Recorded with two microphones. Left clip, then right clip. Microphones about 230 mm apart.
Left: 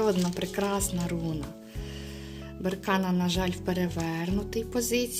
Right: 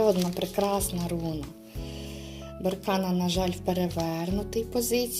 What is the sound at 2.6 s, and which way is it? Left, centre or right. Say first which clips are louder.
Speech: right 1 dB; left.